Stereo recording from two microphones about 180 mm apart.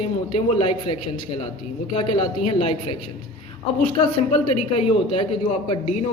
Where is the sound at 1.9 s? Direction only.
30° left (ahead or behind).